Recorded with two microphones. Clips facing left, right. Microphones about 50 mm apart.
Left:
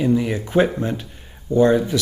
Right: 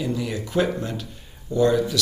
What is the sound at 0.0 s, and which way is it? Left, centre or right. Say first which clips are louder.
Speech: left 7 dB; left.